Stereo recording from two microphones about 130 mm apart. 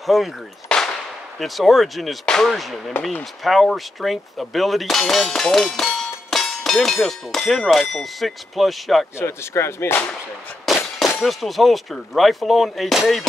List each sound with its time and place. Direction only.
0.0 s speech: centre (ahead or behind)
9.2 s speech: 20° left (ahead or behind)
10.7 s a sound: centre (ahead or behind)
11.1 s speech: centre (ahead or behind)